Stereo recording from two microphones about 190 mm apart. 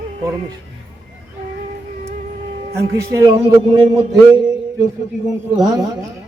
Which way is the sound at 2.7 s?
15° right (ahead or behind).